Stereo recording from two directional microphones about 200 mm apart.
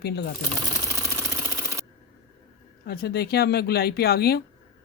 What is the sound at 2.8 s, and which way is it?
Speech, 50° left (ahead or behind).